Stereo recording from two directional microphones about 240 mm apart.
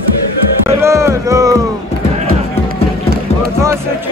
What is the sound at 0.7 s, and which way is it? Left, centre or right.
Music, centre.